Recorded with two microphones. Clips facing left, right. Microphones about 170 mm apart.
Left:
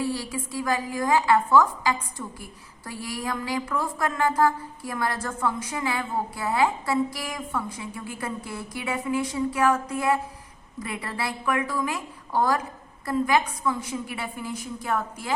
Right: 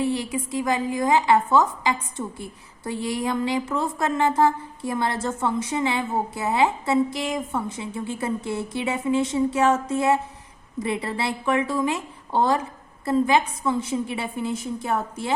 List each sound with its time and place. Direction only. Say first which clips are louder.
0.0 s a woman's voice: right 4 dB; 20° right (ahead or behind)